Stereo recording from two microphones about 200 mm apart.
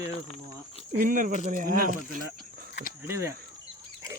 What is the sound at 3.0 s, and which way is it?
Speech, 15° right (ahead or behind).